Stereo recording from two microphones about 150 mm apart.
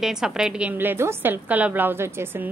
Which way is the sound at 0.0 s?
5° right (ahead or behind).